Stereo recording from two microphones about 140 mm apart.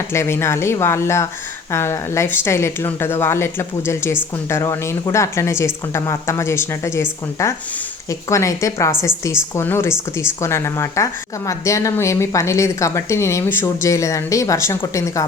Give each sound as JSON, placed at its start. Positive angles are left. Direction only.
{"t": 0.1, "sound": "a woman's voice", "side_deg": 20}